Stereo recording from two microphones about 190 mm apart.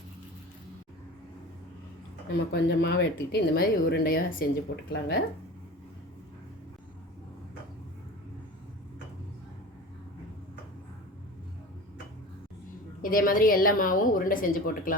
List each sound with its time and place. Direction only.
2.5 s speech: 60° left (ahead or behind)
13.0 s a woman's voice: 50° left (ahead or behind)